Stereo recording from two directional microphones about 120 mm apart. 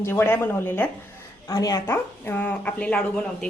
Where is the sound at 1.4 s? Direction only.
30° left (ahead or behind).